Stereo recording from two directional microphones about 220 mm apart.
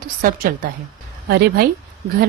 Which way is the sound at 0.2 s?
40° right (ahead or behind).